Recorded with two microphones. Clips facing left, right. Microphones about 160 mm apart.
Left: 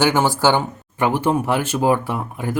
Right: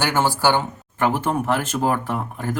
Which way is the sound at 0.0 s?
15° left (ahead or behind).